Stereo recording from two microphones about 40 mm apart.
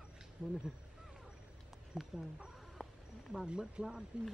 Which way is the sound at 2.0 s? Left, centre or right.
Centre.